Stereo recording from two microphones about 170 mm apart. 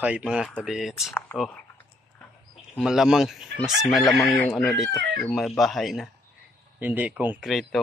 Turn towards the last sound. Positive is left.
turn(degrees=0)  # may be behind; listen again after turning